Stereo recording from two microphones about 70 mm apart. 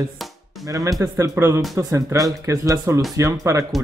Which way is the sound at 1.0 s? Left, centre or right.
Right.